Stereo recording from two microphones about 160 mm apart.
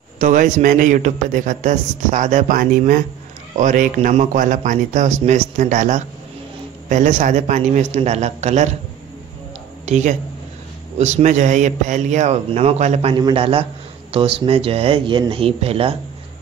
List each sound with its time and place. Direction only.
0.2 s a man's voice: 55° right (ahead or behind)
9.8 s a man's voice: 45° right (ahead or behind)
13.1 s speech: 30° right (ahead or behind)